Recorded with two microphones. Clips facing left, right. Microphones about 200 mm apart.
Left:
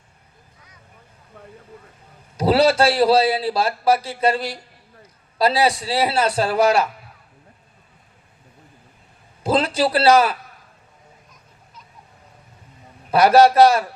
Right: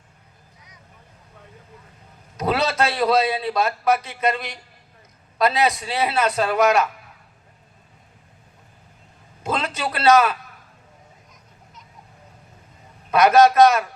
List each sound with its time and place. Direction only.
2.4 s a man's voice: 30° left (ahead or behind)
9.4 s a man's voice: 30° left (ahead or behind)
13.1 s a man's voice: 30° left (ahead or behind)